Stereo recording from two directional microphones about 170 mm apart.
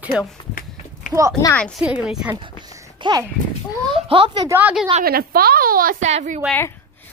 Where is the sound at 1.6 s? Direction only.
Centre (ahead or behind).